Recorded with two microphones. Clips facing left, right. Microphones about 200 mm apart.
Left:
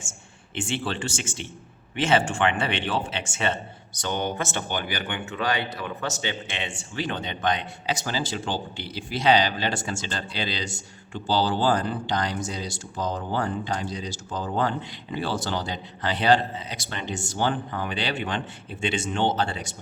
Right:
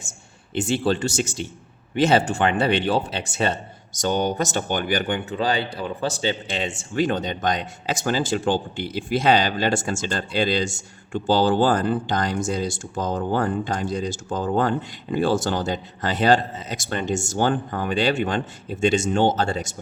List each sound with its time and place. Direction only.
0.5 s speech: 40° right (ahead or behind)